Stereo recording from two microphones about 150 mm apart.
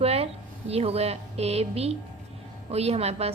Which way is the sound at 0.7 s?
45° right (ahead or behind).